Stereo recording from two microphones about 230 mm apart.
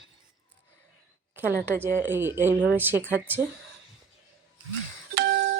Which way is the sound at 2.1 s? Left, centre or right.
Centre.